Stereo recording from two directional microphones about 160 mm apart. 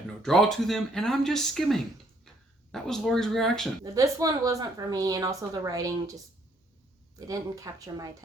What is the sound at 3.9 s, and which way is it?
A woman's voice, 20° right (ahead or behind).